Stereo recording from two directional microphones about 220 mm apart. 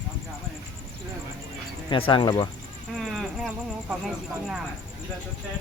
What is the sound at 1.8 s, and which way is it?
Speech, 25° left (ahead or behind).